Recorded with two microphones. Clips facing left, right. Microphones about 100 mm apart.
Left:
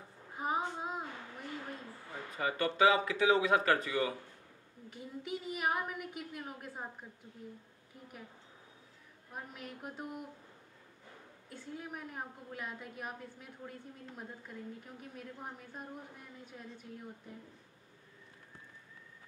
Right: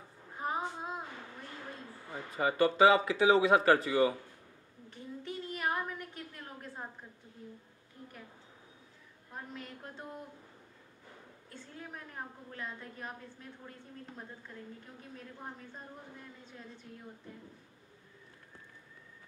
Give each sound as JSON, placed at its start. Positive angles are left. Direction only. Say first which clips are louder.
{"t": 0.4, "sound": "child singing", "louder": "left 1 dB", "side_deg": 5}
{"t": 2.1, "sound": "speech", "louder": "right 5 dB", "side_deg": -10}
{"t": 4.8, "sound": "a sound", "louder": "right 1 dB", "side_deg": 10}
{"t": 9.3, "sound": "a woman's voice", "louder": "right 1 dB", "side_deg": 10}
{"t": 11.4, "sound": "a woman's voice", "louder": "left 3 dB", "side_deg": 10}